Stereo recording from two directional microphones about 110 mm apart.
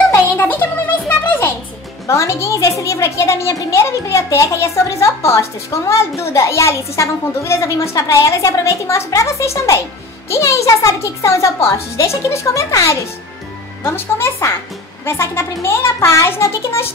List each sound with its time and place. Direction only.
0.1 s music: 15° left (ahead or behind)
2.0 s a woman's voice: 25° left (ahead or behind)